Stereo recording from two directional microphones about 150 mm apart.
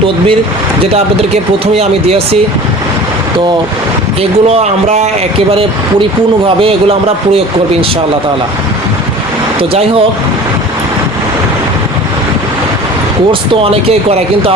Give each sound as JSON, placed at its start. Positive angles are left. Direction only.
{"t": 0.8, "sound": "speech", "side_deg": -40}
{"t": 4.2, "sound": "speech", "side_deg": -45}
{"t": 9.6, "sound": "speech", "side_deg": -40}
{"t": 13.5, "sound": "speech", "side_deg": -40}